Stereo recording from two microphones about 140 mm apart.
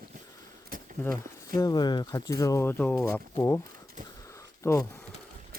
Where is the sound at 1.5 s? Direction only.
25° left (ahead or behind).